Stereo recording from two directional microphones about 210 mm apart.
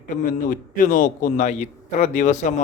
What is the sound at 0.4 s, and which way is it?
A man's voice, 40° left (ahead or behind).